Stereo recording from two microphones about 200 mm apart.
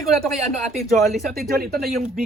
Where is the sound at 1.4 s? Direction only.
50° right (ahead or behind).